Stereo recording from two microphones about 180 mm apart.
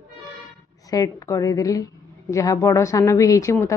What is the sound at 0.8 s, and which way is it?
A woman's voice, 20° left (ahead or behind).